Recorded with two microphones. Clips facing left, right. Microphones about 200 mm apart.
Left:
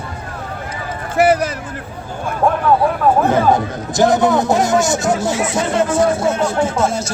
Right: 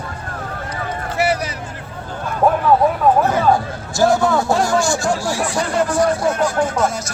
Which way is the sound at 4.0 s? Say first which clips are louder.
Left 2 dB; 20° left (ahead or behind).